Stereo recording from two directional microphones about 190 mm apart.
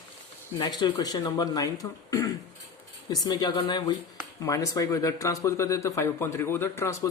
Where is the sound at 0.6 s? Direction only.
20° left (ahead or behind).